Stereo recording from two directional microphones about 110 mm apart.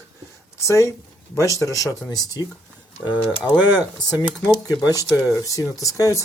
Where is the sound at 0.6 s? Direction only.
25° left (ahead or behind).